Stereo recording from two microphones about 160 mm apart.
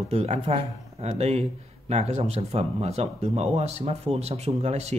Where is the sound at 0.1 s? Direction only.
40° right (ahead or behind).